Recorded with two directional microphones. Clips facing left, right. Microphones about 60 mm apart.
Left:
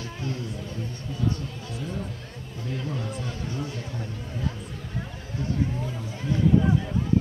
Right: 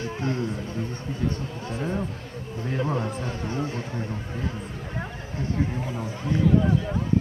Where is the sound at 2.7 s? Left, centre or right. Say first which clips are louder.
Right 5 dB; right.